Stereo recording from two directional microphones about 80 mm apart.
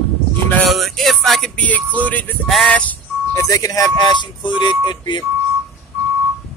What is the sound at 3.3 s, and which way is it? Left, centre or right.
Speech, left.